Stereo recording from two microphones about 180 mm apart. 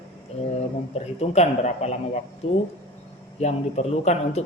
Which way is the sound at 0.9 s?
40° left (ahead or behind).